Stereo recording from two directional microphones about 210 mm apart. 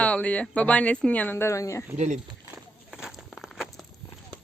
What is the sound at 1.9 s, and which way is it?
Speech, 35° right (ahead or behind).